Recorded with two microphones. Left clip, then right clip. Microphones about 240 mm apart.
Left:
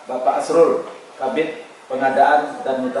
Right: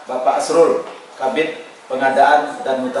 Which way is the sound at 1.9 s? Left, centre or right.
Centre.